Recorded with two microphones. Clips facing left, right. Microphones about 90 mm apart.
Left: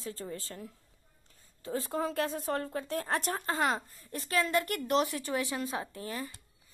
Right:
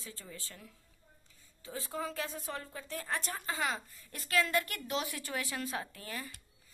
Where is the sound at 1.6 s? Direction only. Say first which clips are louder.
Left 6 dB; 45° left (ahead or behind).